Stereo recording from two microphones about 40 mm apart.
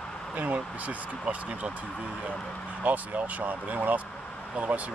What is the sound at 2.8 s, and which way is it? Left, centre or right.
Speech, right.